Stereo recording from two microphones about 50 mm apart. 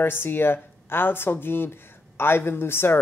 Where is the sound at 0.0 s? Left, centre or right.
Left.